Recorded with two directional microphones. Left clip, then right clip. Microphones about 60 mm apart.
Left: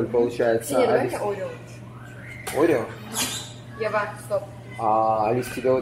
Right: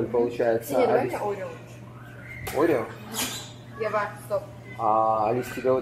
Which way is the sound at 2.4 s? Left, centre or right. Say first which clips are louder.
Left 2 dB; centre.